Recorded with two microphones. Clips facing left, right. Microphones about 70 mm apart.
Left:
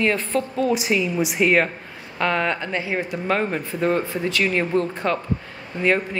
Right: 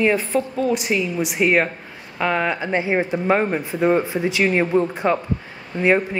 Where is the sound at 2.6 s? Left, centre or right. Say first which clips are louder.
Right 5 dB; right.